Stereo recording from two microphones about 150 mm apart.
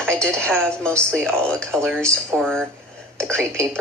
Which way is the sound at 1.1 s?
5° left (ahead or behind).